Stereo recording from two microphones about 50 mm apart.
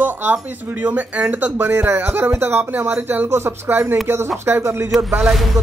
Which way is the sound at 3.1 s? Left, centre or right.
Right.